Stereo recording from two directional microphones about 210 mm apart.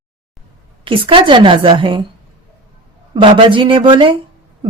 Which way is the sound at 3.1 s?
25° right (ahead or behind).